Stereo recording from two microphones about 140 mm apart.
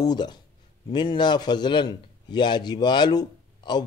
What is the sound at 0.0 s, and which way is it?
A man's voice, 30° left (ahead or behind).